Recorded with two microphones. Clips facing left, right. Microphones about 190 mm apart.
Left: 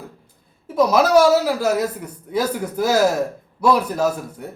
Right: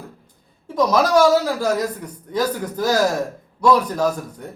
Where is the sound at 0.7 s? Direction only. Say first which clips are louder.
Left 2 dB; 5° left (ahead or behind).